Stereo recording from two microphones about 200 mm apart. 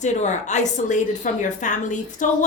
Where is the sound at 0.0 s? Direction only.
35° left (ahead or behind).